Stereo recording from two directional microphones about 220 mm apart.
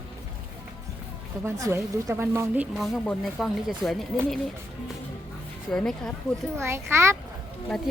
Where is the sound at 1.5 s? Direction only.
15° right (ahead or behind).